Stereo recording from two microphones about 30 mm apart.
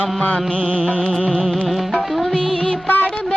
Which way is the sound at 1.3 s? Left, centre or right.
Centre.